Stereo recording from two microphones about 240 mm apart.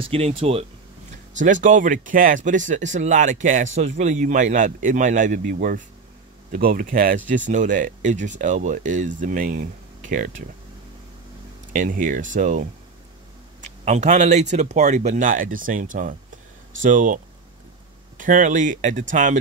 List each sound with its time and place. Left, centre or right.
0.0 s speech: right
11.7 s speech: right